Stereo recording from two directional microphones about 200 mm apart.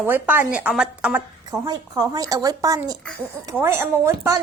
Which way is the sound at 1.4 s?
20° right (ahead or behind).